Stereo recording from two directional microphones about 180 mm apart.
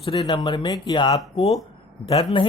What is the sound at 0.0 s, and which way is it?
Speech, 30° left (ahead or behind).